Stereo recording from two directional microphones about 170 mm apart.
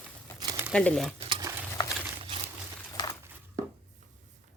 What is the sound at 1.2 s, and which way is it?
Stir, 25° right (ahead or behind).